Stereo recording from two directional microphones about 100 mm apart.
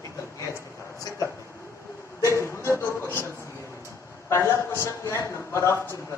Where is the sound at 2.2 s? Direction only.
30° left (ahead or behind).